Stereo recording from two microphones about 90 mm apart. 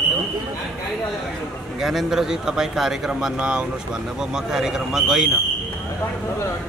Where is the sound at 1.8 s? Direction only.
5° right (ahead or behind).